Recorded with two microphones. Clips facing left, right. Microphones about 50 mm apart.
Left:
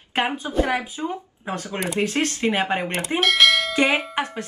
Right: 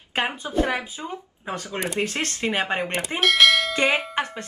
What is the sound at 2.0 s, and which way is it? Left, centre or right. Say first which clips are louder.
Speech: left 5 dB; left.